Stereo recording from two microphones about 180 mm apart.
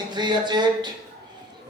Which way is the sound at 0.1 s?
25° right (ahead or behind).